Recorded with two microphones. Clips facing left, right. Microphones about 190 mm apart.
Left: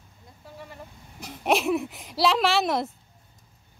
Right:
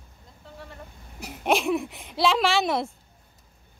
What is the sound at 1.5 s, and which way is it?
A woman's voice, centre (ahead or behind).